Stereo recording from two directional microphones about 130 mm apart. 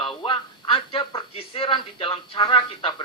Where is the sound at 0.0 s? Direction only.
40° left (ahead or behind).